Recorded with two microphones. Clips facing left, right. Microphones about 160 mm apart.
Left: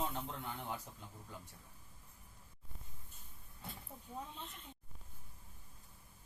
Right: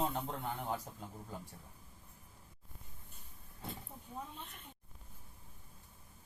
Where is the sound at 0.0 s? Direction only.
40° right (ahead or behind).